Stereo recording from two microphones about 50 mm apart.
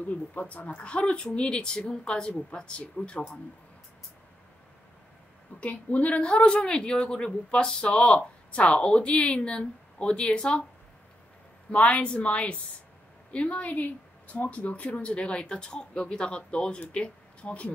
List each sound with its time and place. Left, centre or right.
0.0 s speech: left
5.6 s speech: left
11.7 s speech: left